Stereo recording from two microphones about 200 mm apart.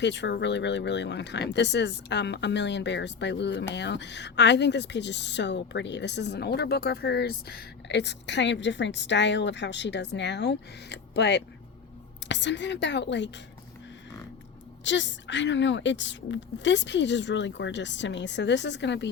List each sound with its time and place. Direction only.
0.0 s speech: 60° left (ahead or behind)
14.8 s speech: 65° left (ahead or behind)